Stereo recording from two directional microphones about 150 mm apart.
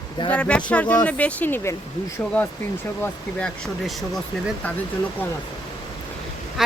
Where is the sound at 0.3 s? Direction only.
10° left (ahead or behind).